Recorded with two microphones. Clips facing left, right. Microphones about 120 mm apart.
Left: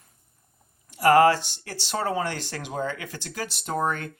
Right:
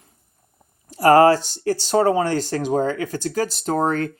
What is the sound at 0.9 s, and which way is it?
Speech, 40° right (ahead or behind).